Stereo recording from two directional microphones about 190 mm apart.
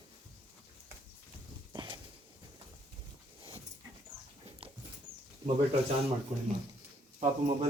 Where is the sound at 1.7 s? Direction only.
25° right (ahead or behind).